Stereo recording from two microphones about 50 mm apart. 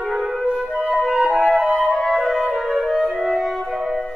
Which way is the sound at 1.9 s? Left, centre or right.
Centre.